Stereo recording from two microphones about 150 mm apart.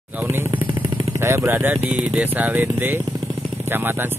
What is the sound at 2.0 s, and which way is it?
Speech, 5° right (ahead or behind).